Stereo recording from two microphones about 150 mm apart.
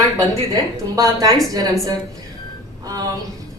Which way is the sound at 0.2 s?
25° right (ahead or behind).